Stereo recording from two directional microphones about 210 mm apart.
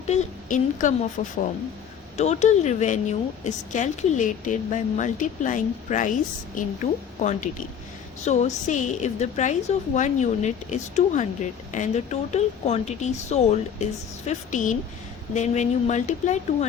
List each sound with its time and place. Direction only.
0.1 s a woman's voice: 35° left (ahead or behind)
7.2 s a woman's voice: 35° left (ahead or behind)